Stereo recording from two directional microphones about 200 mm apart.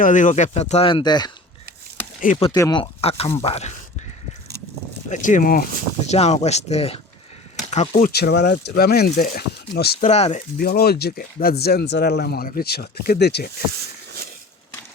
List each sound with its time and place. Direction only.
0.0 s speech: 40° left (ahead or behind); by 1.3 s 20° left (ahead or behind)
2.2 s speech: 35° left (ahead or behind)
2.5 s speech: 20° left (ahead or behind)
5.0 s speech: 40° left (ahead or behind)
10.1 s speech: 30° left (ahead or behind)
10.6 s speech: 50° left (ahead or behind)